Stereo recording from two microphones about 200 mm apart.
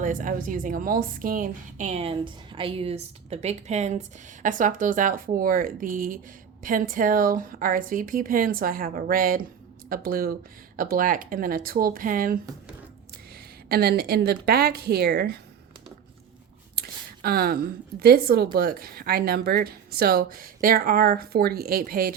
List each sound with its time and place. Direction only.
0.0 s a woman's voice: 40° right (ahead or behind)
13.7 s speech: 50° right (ahead or behind)
16.7 s a woman's voice: 50° right (ahead or behind)